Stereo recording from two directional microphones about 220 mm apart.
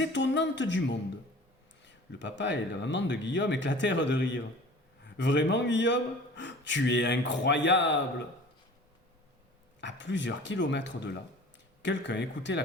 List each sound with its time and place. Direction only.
0.0 s a man's voice: 55° left (ahead or behind)
2.1 s a man's voice: 55° left (ahead or behind)
9.8 s a man's voice: 55° left (ahead or behind)